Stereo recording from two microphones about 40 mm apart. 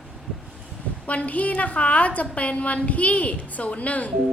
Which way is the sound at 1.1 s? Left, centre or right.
Left.